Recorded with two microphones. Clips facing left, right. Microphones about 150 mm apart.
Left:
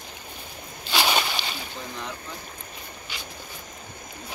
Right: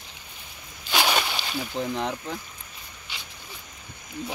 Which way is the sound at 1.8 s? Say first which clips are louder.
Right 9 dB; 90° right.